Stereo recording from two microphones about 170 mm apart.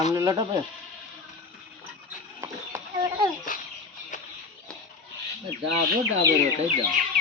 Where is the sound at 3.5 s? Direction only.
55° left (ahead or behind).